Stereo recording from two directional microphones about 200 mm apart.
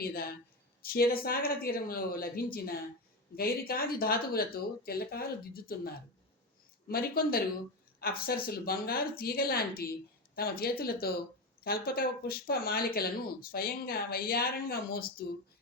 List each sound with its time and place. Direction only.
0.0 s speech: 50° left (ahead or behind)